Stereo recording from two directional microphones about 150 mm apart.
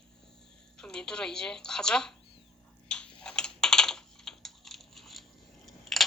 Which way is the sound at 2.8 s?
5° left (ahead or behind).